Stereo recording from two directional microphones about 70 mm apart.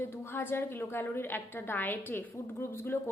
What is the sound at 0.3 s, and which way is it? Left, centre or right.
A woman's voice, left.